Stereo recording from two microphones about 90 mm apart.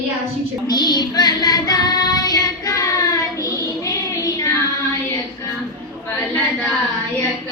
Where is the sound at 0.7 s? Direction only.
50° left (ahead or behind).